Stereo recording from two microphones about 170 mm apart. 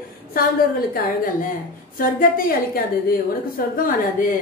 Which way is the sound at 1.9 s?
55° left (ahead or behind).